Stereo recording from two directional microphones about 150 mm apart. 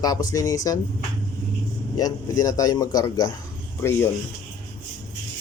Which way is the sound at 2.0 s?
25° left (ahead or behind).